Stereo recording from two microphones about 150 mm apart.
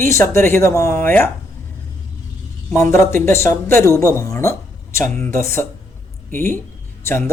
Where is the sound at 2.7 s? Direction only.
20° left (ahead or behind).